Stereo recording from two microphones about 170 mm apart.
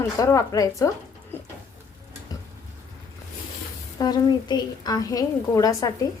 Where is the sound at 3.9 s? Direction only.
25° left (ahead or behind).